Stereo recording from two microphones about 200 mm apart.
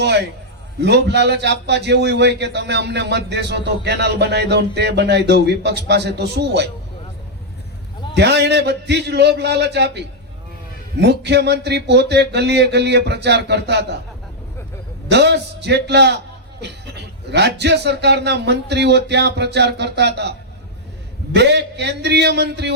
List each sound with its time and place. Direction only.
0.0 s a man's voice: 60° right (ahead or behind)
8.1 s a man's voice: 55° right (ahead or behind)
11.0 s a man's voice: 55° right (ahead or behind)
15.1 s a man's voice: 55° right (ahead or behind)
21.3 s a man's voice: 55° right (ahead or behind)